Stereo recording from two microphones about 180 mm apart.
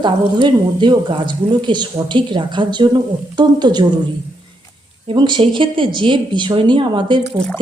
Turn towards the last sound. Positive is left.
turn(degrees=-25)  # may be behind; listen again after turning